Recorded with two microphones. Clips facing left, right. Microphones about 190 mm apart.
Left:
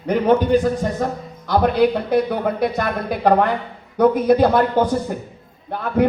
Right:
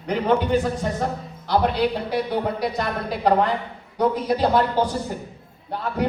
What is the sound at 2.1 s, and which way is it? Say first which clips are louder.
Speech: left 5 dB; 55° left (ahead or behind).